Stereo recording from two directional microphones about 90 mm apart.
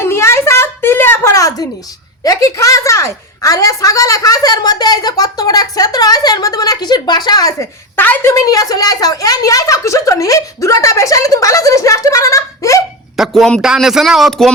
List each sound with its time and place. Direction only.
0.0 s a sound: 30° left (ahead or behind)
1.3 s a sound: 40° left (ahead or behind)
2.2 s a woman's voice: 45° left (ahead or behind)
7.6 s a woman's voice: 20° left (ahead or behind)
8.3 s a woman's voice: 45° left (ahead or behind)
13.1 s speech: centre (ahead or behind)